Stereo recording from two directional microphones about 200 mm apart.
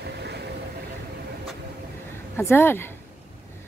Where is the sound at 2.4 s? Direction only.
10° left (ahead or behind).